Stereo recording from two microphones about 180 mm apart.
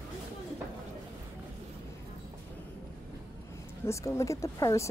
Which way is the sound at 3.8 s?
15° left (ahead or behind).